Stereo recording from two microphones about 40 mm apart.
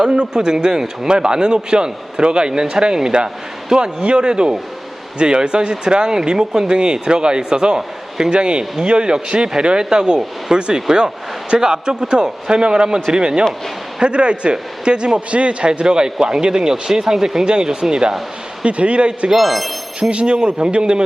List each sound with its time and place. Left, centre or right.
0.0 s a man's voice: centre
18.6 s speech: right
19.4 s speech: centre
20.0 s speech: right